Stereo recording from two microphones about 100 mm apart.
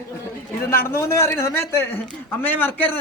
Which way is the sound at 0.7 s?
25° left (ahead or behind).